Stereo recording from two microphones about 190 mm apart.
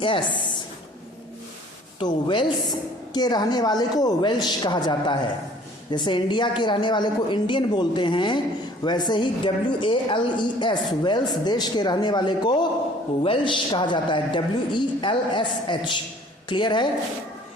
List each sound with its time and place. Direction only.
0.0 s a woman's voice: 25° left (ahead or behind)
2.0 s a woman's voice: 25° left (ahead or behind)